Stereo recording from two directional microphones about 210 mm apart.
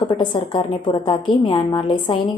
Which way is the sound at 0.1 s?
20° left (ahead or behind).